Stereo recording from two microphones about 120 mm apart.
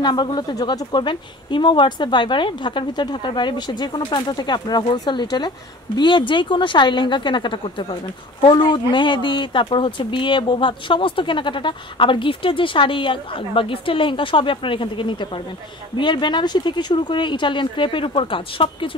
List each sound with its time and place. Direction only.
0.0 s a woman's voice: 40° left (ahead or behind)